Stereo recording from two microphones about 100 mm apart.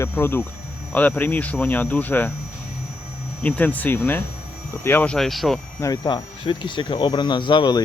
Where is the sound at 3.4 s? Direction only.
15° left (ahead or behind).